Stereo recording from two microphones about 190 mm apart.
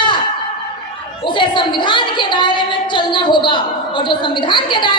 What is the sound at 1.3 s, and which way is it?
A woman's voice, 25° left (ahead or behind).